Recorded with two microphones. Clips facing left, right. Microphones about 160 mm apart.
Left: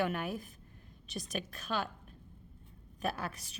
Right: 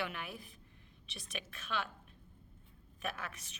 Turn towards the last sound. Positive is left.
turn(degrees=35)  # may be behind; listen again after turning